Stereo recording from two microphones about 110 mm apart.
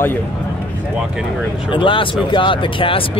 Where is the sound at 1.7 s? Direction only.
50° left (ahead or behind).